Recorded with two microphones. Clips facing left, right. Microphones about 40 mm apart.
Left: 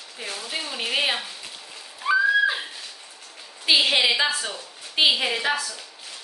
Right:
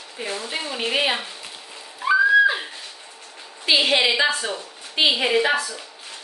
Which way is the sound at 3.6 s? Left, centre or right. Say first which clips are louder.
Right 1 dB; centre.